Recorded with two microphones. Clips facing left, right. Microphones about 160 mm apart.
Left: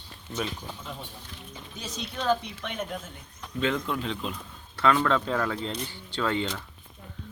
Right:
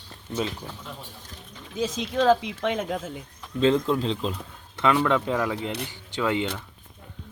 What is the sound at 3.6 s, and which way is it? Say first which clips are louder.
Speech: right 7 dB; 30° right (ahead or behind).